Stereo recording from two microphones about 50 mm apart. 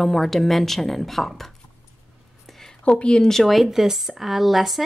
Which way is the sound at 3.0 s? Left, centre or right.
Centre.